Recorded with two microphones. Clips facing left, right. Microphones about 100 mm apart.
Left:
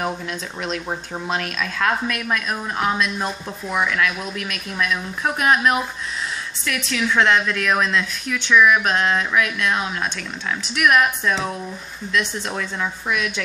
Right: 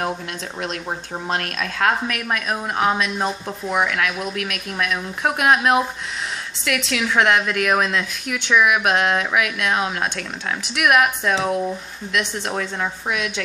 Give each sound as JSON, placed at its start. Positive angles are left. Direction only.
{"t": 1.3, "sound": "a woman's voice", "side_deg": -50}
{"t": 5.2, "sound": "speech", "side_deg": -25}
{"t": 6.6, "sound": "a woman's voice", "side_deg": -70}